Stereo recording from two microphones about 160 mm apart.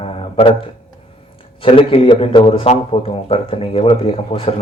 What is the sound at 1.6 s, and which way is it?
Speech, 35° left (ahead or behind).